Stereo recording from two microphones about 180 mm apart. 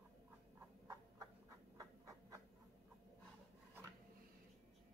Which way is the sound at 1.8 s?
15° right (ahead or behind).